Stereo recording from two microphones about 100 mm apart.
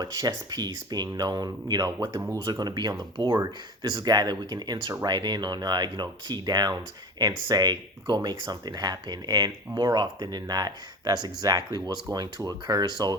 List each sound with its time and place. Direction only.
0.0 s speech: 45° right (ahead or behind)